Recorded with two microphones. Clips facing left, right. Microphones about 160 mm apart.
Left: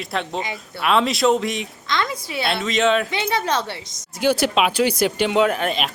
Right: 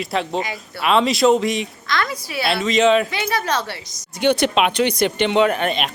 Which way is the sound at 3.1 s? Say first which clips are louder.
Even; 20° left (ahead or behind).